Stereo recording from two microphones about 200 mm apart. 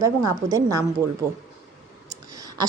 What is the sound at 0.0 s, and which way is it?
Speech, 15° right (ahead or behind).